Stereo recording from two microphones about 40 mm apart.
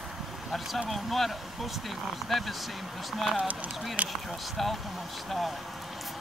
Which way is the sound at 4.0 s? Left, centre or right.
Right.